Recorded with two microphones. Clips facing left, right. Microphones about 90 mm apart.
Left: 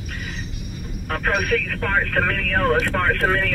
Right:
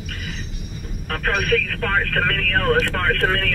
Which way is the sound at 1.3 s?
5° left (ahead or behind).